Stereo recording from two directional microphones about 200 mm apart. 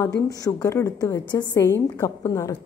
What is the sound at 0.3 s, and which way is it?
A woman's voice, 15° left (ahead or behind).